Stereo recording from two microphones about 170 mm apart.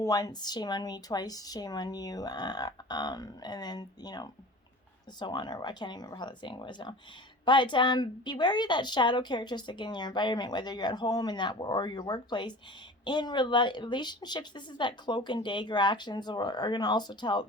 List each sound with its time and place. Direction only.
0.0 s a woman's voice: 20° left (ahead or behind)